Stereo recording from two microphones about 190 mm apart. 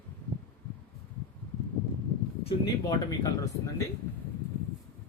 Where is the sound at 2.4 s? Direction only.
20° left (ahead or behind).